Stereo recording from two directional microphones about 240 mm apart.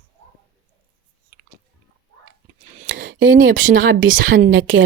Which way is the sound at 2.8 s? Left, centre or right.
Right.